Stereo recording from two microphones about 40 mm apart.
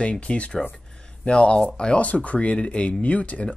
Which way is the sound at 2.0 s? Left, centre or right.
Left.